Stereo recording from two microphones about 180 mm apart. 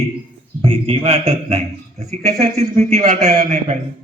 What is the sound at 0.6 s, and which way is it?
A man's voice, 30° right (ahead or behind).